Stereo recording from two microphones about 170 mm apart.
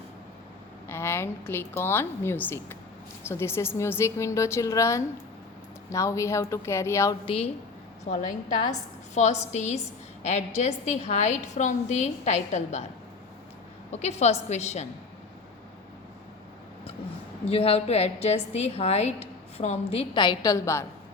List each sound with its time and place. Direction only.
0.9 s a woman's voice: 15° left (ahead or behind)
7.3 s a woman's voice: 35° left (ahead or behind)
9.1 s a woman's voice: 40° left (ahead or behind)
13.9 s a woman's voice: 40° left (ahead or behind)
17.5 s a woman's voice: 35° left (ahead or behind); by 20.8 s 20° left (ahead or behind)